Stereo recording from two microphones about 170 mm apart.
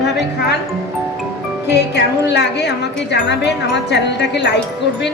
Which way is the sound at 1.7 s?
80° left.